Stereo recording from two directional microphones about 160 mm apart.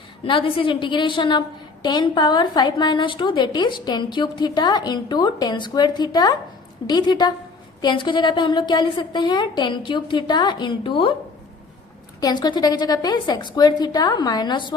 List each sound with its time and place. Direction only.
0.3 s a woman's voice: 35° left (ahead or behind)
12.2 s a woman's voice: 25° left (ahead or behind)